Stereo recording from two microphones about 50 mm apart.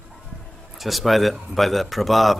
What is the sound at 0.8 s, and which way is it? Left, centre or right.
Speech, centre.